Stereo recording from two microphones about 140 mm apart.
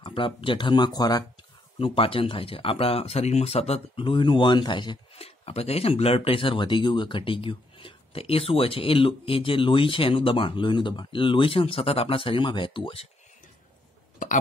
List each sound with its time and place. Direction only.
0.0 s speech: 40° left (ahead or behind)
1.8 s speech: 40° left (ahead or behind)
5.1 s speech: 45° left (ahead or behind)